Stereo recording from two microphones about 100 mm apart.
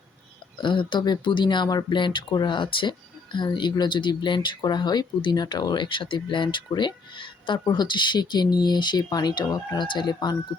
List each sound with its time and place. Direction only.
0.6 s speech: 55° left (ahead or behind)